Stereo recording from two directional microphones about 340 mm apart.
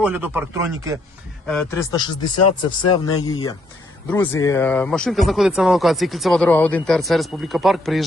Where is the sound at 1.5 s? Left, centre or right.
Centre.